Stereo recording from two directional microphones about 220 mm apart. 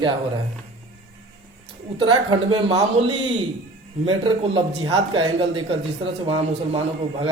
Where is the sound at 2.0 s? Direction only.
20° right (ahead or behind).